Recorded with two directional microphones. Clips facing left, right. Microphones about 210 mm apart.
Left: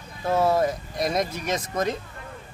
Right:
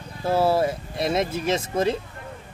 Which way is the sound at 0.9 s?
30° right (ahead or behind).